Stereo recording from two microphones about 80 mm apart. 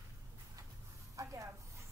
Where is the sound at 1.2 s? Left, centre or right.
Right.